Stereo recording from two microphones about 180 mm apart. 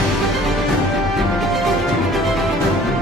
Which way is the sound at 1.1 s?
Centre (ahead or behind).